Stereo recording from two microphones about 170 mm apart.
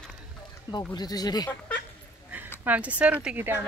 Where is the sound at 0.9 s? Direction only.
25° left (ahead or behind).